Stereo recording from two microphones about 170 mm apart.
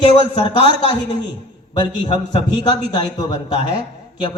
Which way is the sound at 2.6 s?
25° left (ahead or behind).